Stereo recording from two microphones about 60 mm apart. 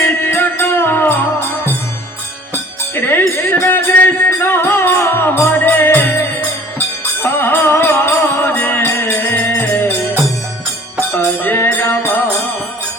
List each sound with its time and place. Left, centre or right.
0.0 s music: left
2.9 s music: left
7.2 s music: left
8.5 s music: left
11.4 s music: left